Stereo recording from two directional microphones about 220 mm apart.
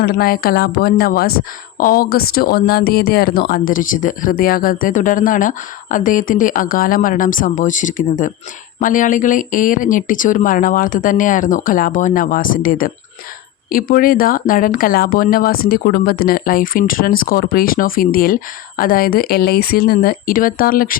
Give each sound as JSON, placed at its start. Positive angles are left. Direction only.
{"t": 0.0, "sound": "speech", "side_deg": 40}